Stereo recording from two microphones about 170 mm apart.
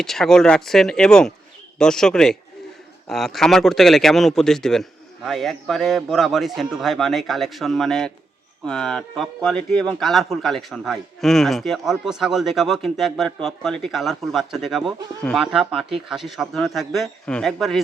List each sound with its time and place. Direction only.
0.0 s speech: centre (ahead or behind)